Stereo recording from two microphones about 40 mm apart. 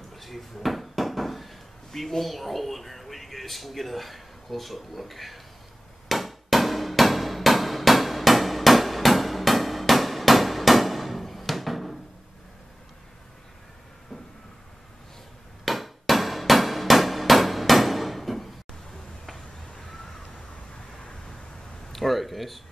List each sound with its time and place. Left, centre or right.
0.1 s a sound: centre
2.0 s speech: centre
6.0 s hammer: centre
15.6 s hammer: centre
19.3 s crow: centre
21.9 s a sound: centre